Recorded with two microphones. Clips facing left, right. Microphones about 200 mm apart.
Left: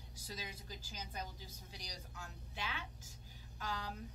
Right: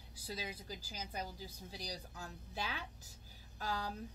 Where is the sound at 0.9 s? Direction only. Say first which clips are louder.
Right 3 dB; 35° right (ahead or behind).